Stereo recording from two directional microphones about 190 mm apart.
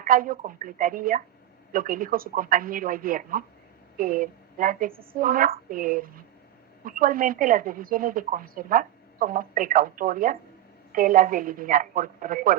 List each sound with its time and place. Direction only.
0.0 s a woman's voice: 50° right (ahead or behind)